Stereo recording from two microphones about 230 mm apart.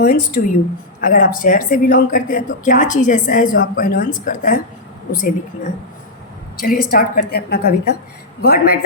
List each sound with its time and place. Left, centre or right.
0.0 s speech: left